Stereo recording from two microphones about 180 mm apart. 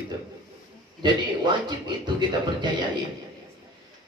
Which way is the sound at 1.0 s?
25° right (ahead or behind).